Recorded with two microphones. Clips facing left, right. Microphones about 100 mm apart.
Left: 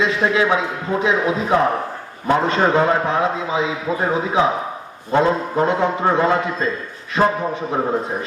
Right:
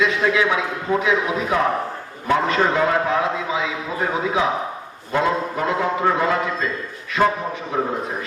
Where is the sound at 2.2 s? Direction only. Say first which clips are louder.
Left 2 dB; 30° left (ahead or behind).